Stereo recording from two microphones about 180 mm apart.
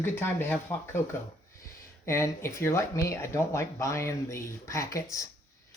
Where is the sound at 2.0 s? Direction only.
15° left (ahead or behind).